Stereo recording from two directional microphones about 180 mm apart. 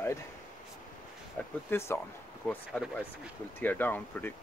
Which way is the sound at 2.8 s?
5° right (ahead or behind).